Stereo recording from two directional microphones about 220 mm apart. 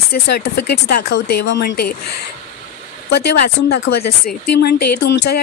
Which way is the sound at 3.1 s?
45° left (ahead or behind).